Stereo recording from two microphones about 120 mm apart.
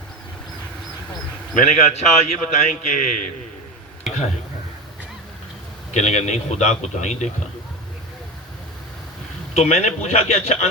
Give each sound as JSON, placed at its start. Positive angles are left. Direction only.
{"t": 1.5, "sound": "a man's voice", "side_deg": 65}
{"t": 5.9, "sound": "a man's voice", "side_deg": 70}
{"t": 9.6, "sound": "a man's voice", "side_deg": 75}